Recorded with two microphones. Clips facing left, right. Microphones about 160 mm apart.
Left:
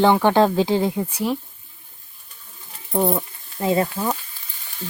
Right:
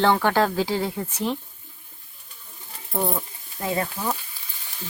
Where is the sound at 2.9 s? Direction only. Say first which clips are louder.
Left 6 dB; 20° left (ahead or behind).